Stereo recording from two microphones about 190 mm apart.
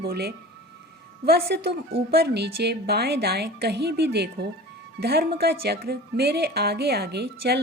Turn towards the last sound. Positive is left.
turn(degrees=-60)  # may be behind; listen again after turning